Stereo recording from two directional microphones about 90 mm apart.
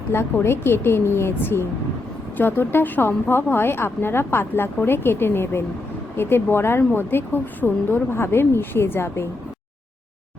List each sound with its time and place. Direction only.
0.1 s speech: 25° left (ahead or behind)